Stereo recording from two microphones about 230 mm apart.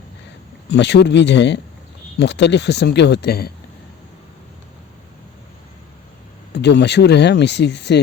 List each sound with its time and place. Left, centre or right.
0.7 s speech: left
6.5 s speech: left